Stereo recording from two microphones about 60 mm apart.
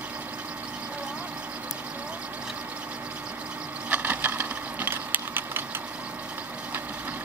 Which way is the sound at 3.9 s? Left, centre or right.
Right.